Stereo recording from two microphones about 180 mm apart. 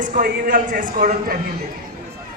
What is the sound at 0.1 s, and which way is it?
A woman's voice, 45° right (ahead or behind).